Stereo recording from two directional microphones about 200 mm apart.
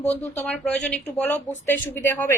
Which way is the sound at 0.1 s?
5° left (ahead or behind).